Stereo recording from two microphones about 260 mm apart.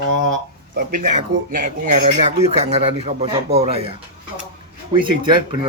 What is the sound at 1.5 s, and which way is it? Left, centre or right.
Speech, right.